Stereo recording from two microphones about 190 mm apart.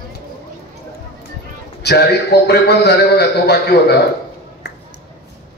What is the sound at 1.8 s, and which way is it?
A man's voice, 60° left (ahead or behind).